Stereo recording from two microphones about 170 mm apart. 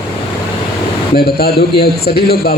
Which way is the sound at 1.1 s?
65° left (ahead or behind).